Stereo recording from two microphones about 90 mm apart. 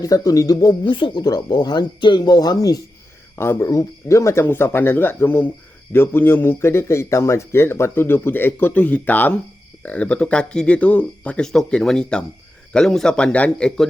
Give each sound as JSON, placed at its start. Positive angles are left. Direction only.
{"t": 0.0, "sound": "speech", "side_deg": 45}
{"t": 0.7, "sound": "speech", "side_deg": 65}
{"t": 1.2, "sound": "speech", "side_deg": 50}
{"t": 3.3, "sound": "speech", "side_deg": 25}
{"t": 4.4, "sound": "a man's voice", "side_deg": 25}